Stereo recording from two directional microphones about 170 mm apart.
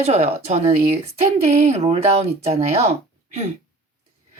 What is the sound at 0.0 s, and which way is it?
Speech, 40° right (ahead or behind).